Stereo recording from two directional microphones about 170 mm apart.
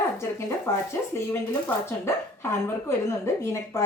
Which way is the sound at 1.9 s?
15° left (ahead or behind).